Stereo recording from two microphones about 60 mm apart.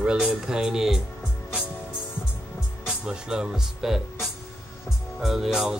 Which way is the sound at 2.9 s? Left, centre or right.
Centre.